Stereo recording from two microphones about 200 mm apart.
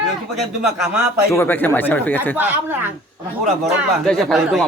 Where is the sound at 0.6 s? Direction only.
5° right (ahead or behind).